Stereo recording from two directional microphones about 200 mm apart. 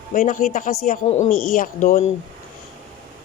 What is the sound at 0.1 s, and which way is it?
Speech, 40° left (ahead or behind).